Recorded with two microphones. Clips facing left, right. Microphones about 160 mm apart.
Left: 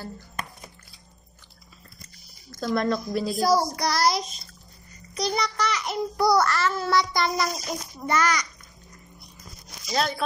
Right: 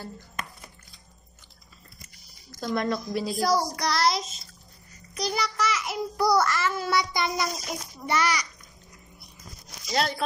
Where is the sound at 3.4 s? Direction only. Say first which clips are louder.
Left 3 dB; 5° left (ahead or behind).